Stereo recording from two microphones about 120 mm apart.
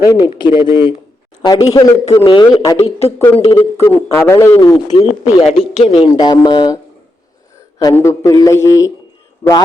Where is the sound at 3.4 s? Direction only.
45° left (ahead or behind).